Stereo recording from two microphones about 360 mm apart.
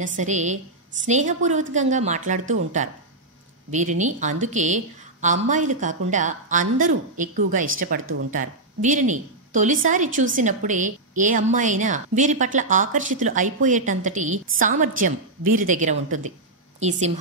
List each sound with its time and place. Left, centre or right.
0.0 s a woman's voice: right
4.0 s a woman's voice: centre